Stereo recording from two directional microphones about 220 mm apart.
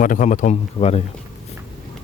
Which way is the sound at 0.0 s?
35° left (ahead or behind).